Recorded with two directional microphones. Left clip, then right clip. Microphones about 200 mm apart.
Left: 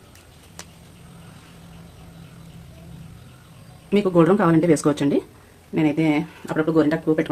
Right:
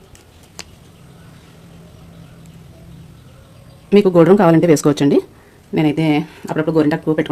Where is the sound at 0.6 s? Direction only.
40° right (ahead or behind).